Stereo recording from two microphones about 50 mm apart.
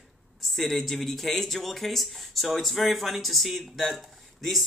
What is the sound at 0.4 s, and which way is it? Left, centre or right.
Speech, centre.